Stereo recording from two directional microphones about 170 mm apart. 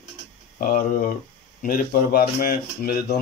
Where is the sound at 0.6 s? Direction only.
60° left (ahead or behind).